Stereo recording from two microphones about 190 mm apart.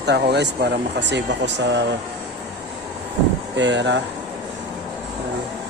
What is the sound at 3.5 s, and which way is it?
Speech, 70° right (ahead or behind).